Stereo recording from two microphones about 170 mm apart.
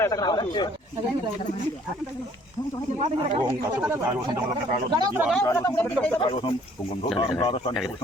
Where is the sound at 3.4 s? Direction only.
10° right (ahead or behind).